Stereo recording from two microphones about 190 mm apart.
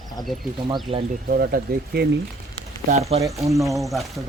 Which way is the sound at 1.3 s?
50° right (ahead or behind).